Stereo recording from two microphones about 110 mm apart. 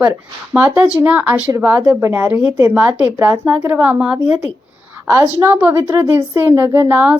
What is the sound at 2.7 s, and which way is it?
Speech, 15° right (ahead or behind).